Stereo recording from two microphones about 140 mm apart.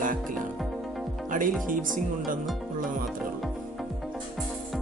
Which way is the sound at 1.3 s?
75° right (ahead or behind).